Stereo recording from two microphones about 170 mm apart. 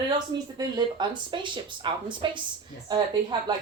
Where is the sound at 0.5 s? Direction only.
25° right (ahead or behind).